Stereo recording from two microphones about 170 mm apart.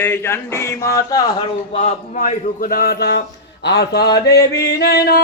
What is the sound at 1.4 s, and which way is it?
A man's voice, 45° left (ahead or behind).